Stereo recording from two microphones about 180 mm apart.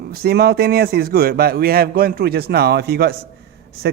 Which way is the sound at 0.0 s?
60° right (ahead or behind).